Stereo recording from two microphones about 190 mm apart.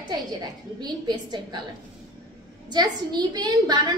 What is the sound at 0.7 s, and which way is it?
Speech, 20° right (ahead or behind).